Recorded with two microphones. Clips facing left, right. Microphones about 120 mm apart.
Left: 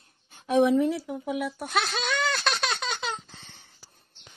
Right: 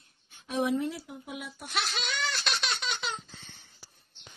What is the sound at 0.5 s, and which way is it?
Speech, 90° left.